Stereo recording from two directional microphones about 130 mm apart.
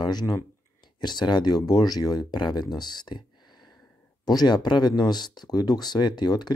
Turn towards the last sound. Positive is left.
turn(degrees=35)  # may be behind; listen again after turning